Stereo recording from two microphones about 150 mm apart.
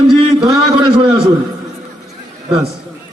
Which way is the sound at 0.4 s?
30° right (ahead or behind).